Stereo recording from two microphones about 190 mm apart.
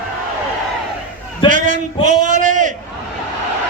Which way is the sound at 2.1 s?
40° right (ahead or behind).